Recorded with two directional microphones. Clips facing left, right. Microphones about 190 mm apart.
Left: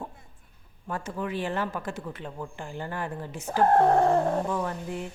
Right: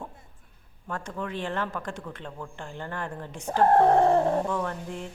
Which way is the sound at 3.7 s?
20° right (ahead or behind).